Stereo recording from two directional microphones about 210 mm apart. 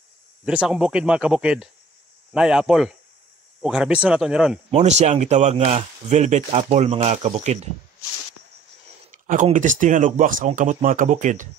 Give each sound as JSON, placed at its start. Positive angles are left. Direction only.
{"t": 0.5, "sound": "speech", "side_deg": -5}
{"t": 4.6, "sound": "speech", "side_deg": -30}
{"t": 9.1, "sound": "speech", "side_deg": -35}